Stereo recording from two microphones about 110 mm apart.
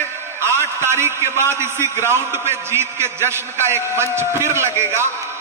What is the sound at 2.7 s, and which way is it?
A man's voice, 25° right (ahead or behind).